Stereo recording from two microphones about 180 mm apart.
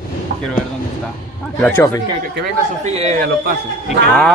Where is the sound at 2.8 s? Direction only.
35° right (ahead or behind).